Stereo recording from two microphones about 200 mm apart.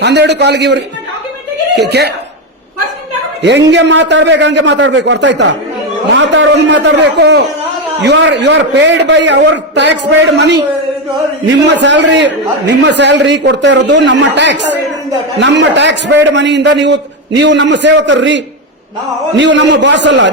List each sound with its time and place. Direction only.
0.0 s a man's voice: 60° right (ahead or behind)
1.9 s a man's voice: 55° right (ahead or behind)
3.4 s a man's voice: 60° right (ahead or behind)